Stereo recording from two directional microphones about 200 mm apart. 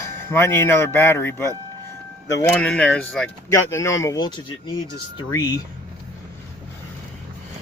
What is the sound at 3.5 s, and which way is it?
Speech, 15° left (ahead or behind).